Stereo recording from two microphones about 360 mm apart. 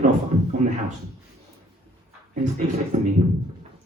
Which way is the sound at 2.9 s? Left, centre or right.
Centre.